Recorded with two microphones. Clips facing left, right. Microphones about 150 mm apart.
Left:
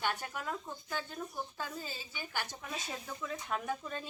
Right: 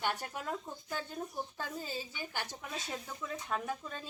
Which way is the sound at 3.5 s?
Centre (ahead or behind).